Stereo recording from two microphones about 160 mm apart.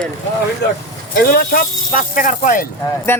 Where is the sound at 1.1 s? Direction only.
75° left (ahead or behind); by 2.6 s 55° left (ahead or behind).